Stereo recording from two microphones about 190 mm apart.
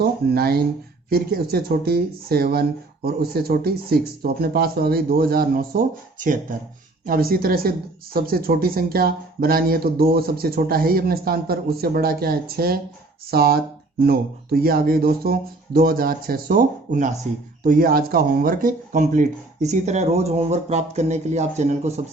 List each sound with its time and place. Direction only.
0.0 s speech: 55° right (ahead or behind); by 22.0 s 35° right (ahead or behind)